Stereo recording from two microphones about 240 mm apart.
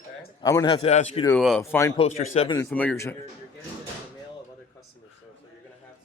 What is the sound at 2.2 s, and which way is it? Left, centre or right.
Speech, left.